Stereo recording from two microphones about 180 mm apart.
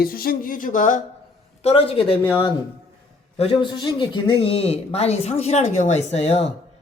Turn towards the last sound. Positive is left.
turn(degrees=35)  # may be behind; listen again after turning